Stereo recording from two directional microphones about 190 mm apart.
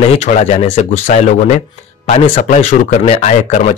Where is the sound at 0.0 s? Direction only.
35° left (ahead or behind).